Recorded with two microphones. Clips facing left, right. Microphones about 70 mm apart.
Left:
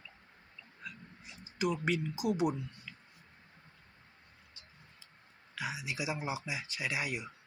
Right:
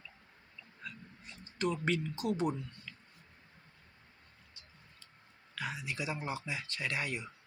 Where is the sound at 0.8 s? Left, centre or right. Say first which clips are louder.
Even; centre.